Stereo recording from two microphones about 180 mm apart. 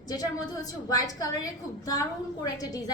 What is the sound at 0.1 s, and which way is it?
A woman's voice, 20° left (ahead or behind).